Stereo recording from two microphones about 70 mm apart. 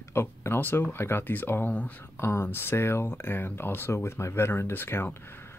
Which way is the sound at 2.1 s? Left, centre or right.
Left.